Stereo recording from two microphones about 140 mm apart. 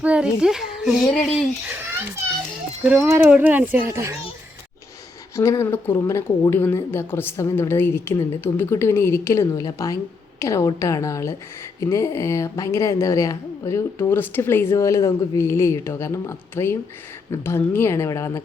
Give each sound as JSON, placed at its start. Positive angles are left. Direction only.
{"t": 0.0, "sound": "a child's voice", "side_deg": -10}
{"t": 2.8, "sound": "speech", "side_deg": -15}
{"t": 5.4, "sound": "a woman's voice", "side_deg": 20}